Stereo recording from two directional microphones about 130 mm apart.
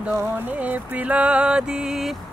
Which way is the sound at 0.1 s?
20° right (ahead or behind).